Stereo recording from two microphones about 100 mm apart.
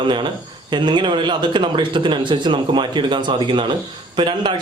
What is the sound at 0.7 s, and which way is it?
A man's voice, 50° right (ahead or behind).